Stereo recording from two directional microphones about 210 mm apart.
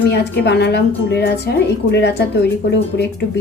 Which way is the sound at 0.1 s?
55° left (ahead or behind).